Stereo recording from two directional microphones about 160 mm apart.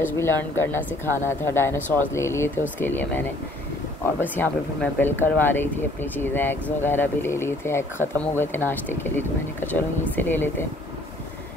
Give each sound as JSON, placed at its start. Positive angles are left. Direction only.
{"t": 0.0, "sound": "speech", "side_deg": 15}